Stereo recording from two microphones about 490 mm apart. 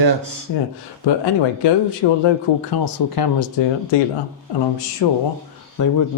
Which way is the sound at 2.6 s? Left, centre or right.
Left.